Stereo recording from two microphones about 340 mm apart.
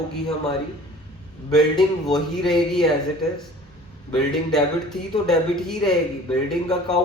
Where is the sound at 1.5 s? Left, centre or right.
Centre.